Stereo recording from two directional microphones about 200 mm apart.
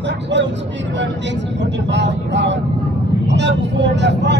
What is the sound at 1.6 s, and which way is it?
Vehicle, 60° right (ahead or behind).